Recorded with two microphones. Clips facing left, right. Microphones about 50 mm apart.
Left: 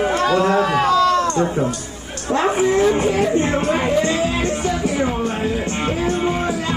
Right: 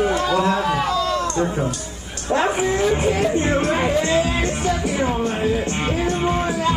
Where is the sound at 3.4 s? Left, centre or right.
Centre.